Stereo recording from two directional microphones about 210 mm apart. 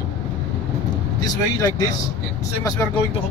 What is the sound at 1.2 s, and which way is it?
Speech, 15° left (ahead or behind).